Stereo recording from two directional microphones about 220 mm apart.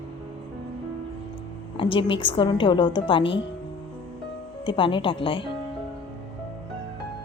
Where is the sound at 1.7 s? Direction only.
25° left (ahead or behind).